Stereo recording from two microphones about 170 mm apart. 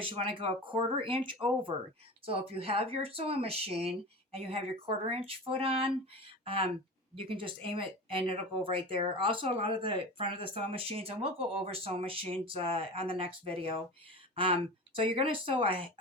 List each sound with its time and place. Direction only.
0.0 s speech: 30° right (ahead or behind)